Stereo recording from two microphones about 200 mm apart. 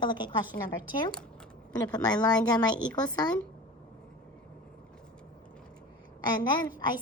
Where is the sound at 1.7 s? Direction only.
20° left (ahead or behind).